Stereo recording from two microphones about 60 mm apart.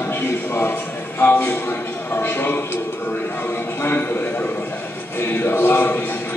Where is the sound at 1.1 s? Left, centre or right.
Left.